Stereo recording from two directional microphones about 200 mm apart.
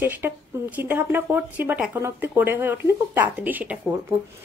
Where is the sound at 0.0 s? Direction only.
10° right (ahead or behind).